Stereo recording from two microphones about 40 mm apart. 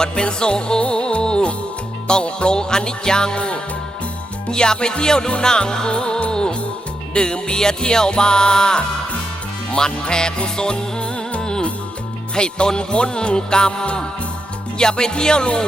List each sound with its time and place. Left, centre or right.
0.0 s music: left